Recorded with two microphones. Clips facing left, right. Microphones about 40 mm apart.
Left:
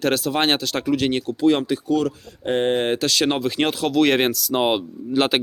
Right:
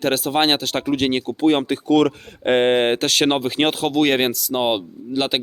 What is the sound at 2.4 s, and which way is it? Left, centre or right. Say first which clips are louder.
Speech: right 4 dB; right.